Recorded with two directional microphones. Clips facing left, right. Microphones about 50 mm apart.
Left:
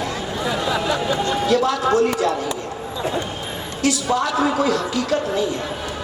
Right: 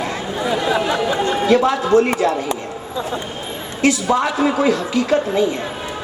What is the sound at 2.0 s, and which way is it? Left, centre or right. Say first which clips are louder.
Speech: right 3 dB; right.